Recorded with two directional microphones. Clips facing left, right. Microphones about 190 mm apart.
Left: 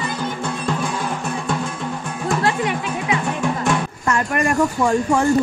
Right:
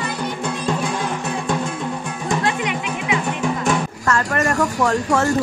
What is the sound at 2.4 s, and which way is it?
Music, 40° left (ahead or behind).